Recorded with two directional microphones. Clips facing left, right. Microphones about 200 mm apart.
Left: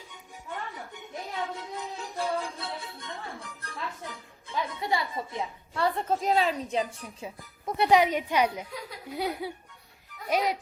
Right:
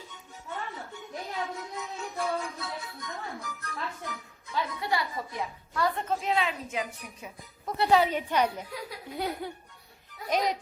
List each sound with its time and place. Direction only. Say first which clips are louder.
0.1 s music: left 2 dB; 15° left (ahead or behind)
1.1 s music: even; 30° left (ahead or behind)
4.7 s a woman's voice: left 3 dB; 25° left (ahead or behind)
7.8 s a woman's voice: left 1 dB; 15° left (ahead or behind)